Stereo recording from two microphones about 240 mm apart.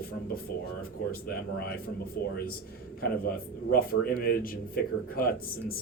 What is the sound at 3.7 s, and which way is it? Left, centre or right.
Speech, left.